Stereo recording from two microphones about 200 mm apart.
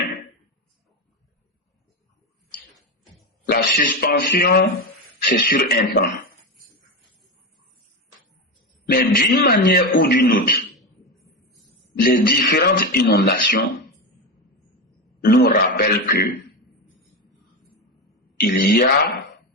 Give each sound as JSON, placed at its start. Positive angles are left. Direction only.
{"t": 3.4, "sound": "speech", "side_deg": 45}
{"t": 8.9, "sound": "speech", "side_deg": 50}
{"t": 10.8, "sound": "a sound", "side_deg": 0}
{"t": 11.9, "sound": "speech", "side_deg": 50}
{"t": 15.2, "sound": "speech", "side_deg": 50}
{"t": 18.3, "sound": "speech", "side_deg": 50}